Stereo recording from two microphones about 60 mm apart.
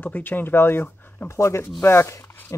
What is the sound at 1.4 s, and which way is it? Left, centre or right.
Speech, left.